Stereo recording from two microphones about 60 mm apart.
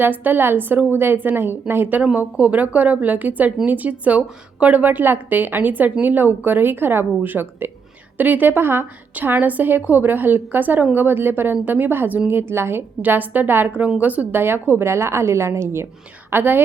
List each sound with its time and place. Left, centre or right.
0.0 s a woman's voice: right
2.0 s a woman's voice: right
13.0 s a woman's voice: right
14.4 s a woman's voice: right
16.3 s a woman's voice: right